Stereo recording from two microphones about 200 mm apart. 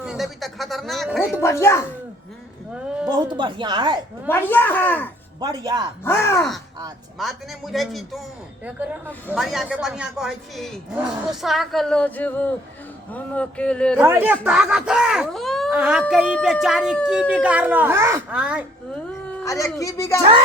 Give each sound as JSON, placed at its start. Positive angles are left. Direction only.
{"t": 0.0, "sound": "speech", "side_deg": 0}
{"t": 1.4, "sound": "a woman's voice", "side_deg": 15}
{"t": 3.1, "sound": "speech", "side_deg": -20}
{"t": 4.3, "sound": "a woman's voice", "side_deg": 10}
{"t": 5.4, "sound": "speech", "side_deg": -20}
{"t": 6.1, "sound": "a woman's voice", "side_deg": 10}
{"t": 7.2, "sound": "speech", "side_deg": 0}
{"t": 14.0, "sound": "speech", "side_deg": -10}
{"t": 19.5, "sound": "a woman's voice", "side_deg": 15}